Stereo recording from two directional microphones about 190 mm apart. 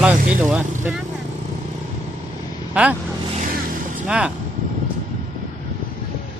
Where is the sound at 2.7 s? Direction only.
5° right (ahead or behind).